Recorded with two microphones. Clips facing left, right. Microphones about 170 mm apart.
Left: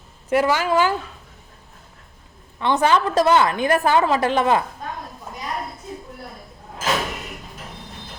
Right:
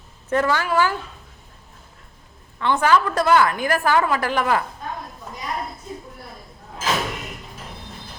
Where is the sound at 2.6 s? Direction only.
20° left (ahead or behind).